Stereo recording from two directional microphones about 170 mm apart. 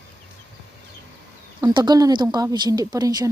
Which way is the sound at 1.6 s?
25° right (ahead or behind).